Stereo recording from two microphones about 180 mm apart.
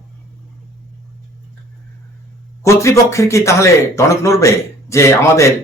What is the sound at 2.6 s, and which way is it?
Speech, 15° left (ahead or behind).